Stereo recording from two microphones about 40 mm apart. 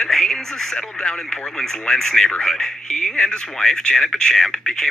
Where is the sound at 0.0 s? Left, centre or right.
Centre.